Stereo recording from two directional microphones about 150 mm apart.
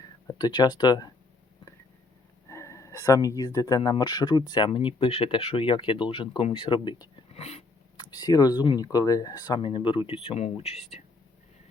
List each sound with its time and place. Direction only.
0.3 s speech: 25° left (ahead or behind)
2.5 s speech: 20° left (ahead or behind)
7.3 s a sound: 45° left (ahead or behind)
7.9 s speech: 25° left (ahead or behind); by 10.8 s 45° left (ahead or behind)